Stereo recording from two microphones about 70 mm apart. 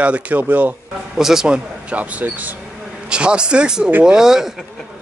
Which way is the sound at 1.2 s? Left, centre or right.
Centre.